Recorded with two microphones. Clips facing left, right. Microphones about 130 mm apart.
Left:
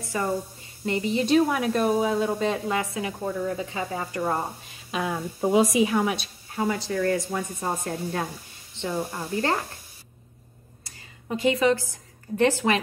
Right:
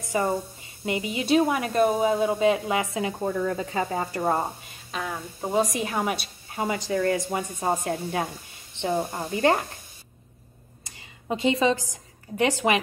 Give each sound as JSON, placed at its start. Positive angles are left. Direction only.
{"t": 0.0, "sound": "a woman's voice", "side_deg": -20}
{"t": 2.8, "sound": "a woman's voice", "side_deg": -30}
{"t": 3.3, "sound": "speech", "side_deg": -50}
{"t": 3.9, "sound": "speech", "side_deg": -35}
{"t": 4.9, "sound": "speech", "side_deg": 20}
{"t": 5.4, "sound": "speech", "side_deg": 5}
{"t": 6.5, "sound": "a woman's voice", "side_deg": -15}
{"t": 11.2, "sound": "a woman's voice", "side_deg": -25}